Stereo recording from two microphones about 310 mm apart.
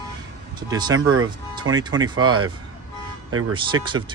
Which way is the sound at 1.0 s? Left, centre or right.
Right.